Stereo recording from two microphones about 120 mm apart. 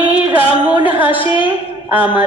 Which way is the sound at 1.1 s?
45° left (ahead or behind).